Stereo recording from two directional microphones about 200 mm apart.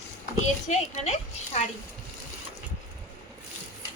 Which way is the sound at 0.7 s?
35° left (ahead or behind).